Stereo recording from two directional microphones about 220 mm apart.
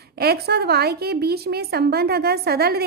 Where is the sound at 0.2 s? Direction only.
45° right (ahead or behind).